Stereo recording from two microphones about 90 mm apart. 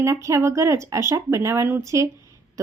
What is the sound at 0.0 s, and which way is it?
Speech, 35° right (ahead or behind).